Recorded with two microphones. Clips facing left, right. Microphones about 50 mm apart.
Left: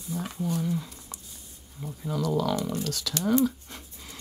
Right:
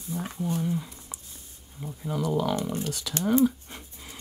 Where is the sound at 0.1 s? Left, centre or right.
Right.